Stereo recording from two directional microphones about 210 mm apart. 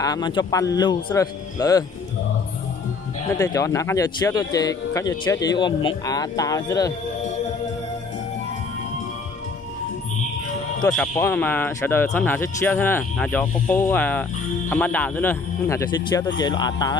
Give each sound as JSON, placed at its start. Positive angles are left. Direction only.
{"t": 0.0, "sound": "a man's voice", "side_deg": 20}
{"t": 3.3, "sound": "a man's voice", "side_deg": 15}
{"t": 10.8, "sound": "a man's voice", "side_deg": 5}